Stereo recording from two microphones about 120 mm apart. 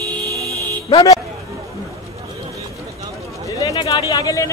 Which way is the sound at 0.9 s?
30° left (ahead or behind).